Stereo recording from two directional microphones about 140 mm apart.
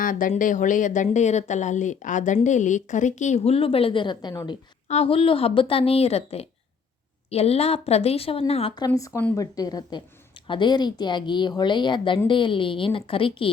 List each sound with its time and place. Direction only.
0.0 s speech: 75° left (ahead or behind); by 4.5 s 30° left (ahead or behind)
4.9 s a woman's voice: 45° left (ahead or behind)
9.3 s a woman's voice: 25° left (ahead or behind)